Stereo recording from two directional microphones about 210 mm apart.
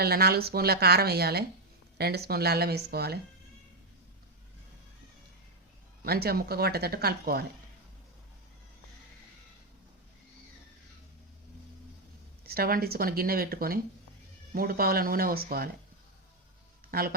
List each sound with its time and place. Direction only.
0.0 s a woman's voice: 45° right (ahead or behind)
6.1 s a woman's voice: 50° right (ahead or behind)
12.5 s a woman's voice: 45° right (ahead or behind)
16.9 s a woman's voice: 45° right (ahead or behind)